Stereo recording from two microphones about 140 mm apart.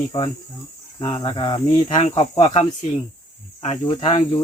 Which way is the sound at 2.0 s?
45° left (ahead or behind).